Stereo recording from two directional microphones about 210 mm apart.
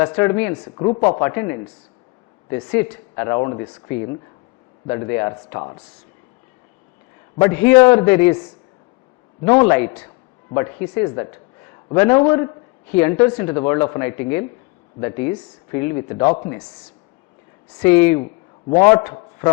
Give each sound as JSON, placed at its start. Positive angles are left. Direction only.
{"t": 0.0, "sound": "speech", "side_deg": 10}
{"t": 0.6, "sound": "speech", "side_deg": 25}
{"t": 1.2, "sound": "speech", "side_deg": 15}
{"t": 2.6, "sound": "speech", "side_deg": 10}
{"t": 7.3, "sound": "speech", "side_deg": 10}
{"t": 17.7, "sound": "speech", "side_deg": 10}